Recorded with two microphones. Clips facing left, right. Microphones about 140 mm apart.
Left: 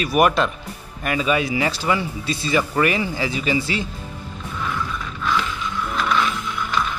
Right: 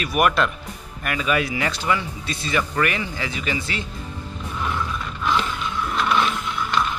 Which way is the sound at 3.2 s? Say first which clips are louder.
Left 5 dB; 30° left (ahead or behind).